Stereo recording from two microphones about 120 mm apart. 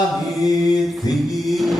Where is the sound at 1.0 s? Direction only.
Centre (ahead or behind).